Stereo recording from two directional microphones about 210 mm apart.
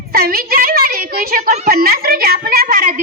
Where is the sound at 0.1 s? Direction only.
45° right (ahead or behind).